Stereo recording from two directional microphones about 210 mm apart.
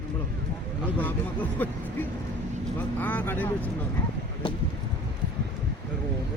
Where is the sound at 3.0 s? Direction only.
10° left (ahead or behind).